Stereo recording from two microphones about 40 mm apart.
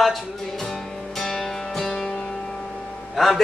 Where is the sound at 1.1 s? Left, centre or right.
Centre.